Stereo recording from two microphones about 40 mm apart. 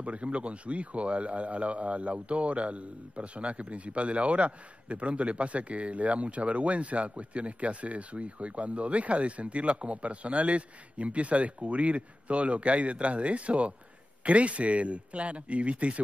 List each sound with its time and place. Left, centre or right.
0.0 s speech: right